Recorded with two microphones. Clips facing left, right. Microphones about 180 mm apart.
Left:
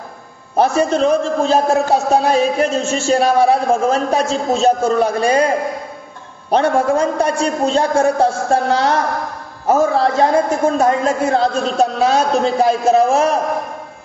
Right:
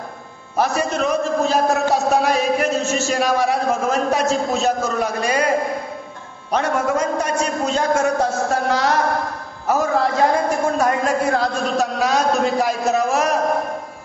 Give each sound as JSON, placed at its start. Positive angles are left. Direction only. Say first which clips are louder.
{"t": 0.6, "sound": "a man's voice", "louder": "left 5 dB", "side_deg": 30}
{"t": 6.5, "sound": "a man's voice", "louder": "left 5 dB", "side_deg": 30}